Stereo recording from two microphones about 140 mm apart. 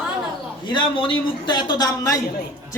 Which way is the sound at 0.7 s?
35° left (ahead or behind).